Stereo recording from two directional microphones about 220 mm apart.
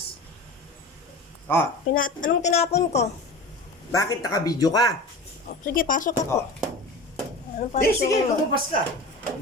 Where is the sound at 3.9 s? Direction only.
15° left (ahead or behind).